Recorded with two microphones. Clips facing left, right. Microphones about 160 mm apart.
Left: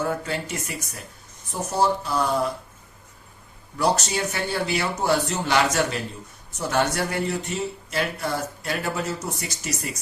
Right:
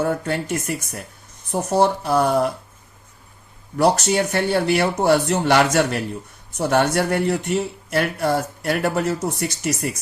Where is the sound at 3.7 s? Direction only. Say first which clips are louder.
Right 6 dB; 60° right (ahead or behind).